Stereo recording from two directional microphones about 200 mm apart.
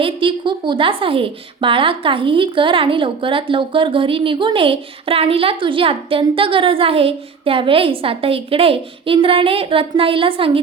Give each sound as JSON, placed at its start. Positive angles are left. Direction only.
{"t": 0.0, "sound": "a woman's voice", "side_deg": -25}